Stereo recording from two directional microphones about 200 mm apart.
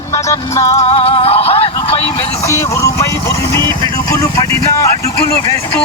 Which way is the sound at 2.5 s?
15° left (ahead or behind).